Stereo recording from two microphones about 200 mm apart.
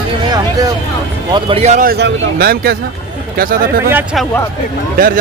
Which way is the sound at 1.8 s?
55° right (ahead or behind).